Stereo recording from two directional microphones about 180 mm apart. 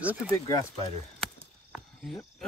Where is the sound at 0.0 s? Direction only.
10° right (ahead or behind).